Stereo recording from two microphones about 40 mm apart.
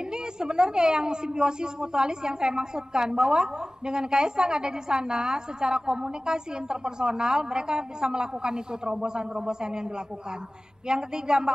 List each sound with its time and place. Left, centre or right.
0.0 s a woman's voice: centre